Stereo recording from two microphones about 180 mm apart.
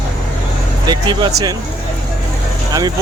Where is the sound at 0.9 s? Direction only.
25° right (ahead or behind).